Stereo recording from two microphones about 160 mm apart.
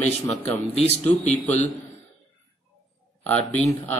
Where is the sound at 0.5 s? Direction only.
40° left (ahead or behind).